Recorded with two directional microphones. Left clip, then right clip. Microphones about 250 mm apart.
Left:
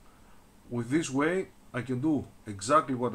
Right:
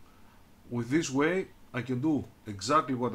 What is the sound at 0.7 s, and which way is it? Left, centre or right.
Speech, centre.